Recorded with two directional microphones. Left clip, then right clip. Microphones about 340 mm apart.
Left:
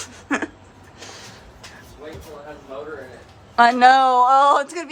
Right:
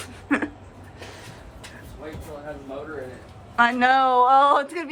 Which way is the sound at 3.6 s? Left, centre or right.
Centre.